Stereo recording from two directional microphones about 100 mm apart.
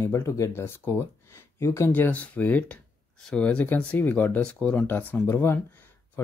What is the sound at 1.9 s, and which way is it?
Speech, 15° left (ahead or behind).